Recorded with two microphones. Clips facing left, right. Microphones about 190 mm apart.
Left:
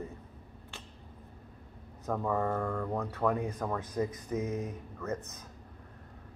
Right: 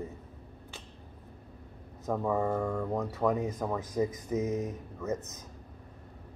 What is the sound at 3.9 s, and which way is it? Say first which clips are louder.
Speech: right 3 dB; 20° right (ahead or behind).